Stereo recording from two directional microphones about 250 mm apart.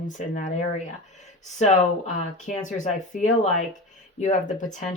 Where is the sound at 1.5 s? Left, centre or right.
Left.